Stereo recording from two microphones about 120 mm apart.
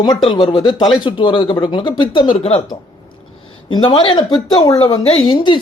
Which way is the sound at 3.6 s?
40° left (ahead or behind).